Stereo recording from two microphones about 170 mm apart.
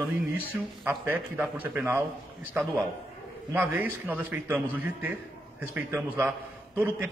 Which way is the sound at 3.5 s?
10° right (ahead or behind).